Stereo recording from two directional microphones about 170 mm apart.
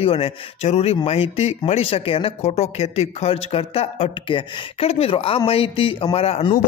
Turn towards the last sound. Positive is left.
turn(degrees=35)  # may be behind; listen again after turning